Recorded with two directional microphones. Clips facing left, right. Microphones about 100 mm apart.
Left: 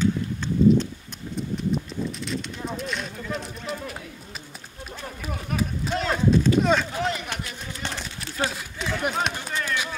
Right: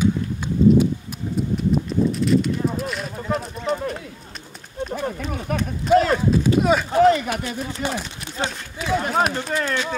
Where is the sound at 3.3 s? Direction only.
40° right (ahead or behind).